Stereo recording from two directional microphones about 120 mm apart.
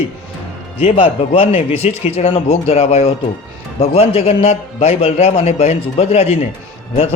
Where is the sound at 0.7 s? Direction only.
50° left (ahead or behind).